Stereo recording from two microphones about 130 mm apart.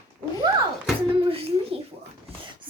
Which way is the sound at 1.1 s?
45° right (ahead or behind).